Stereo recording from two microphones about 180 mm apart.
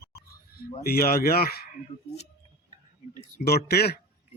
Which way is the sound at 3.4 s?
60° left (ahead or behind).